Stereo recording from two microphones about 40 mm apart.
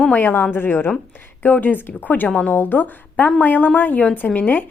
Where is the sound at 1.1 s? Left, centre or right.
Left.